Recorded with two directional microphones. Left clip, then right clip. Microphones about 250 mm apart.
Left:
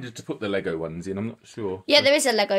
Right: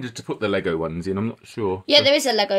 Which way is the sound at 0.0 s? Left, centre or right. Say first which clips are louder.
Right 5 dB; right.